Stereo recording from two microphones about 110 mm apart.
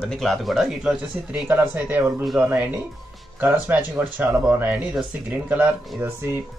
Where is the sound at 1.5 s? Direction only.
15° right (ahead or behind).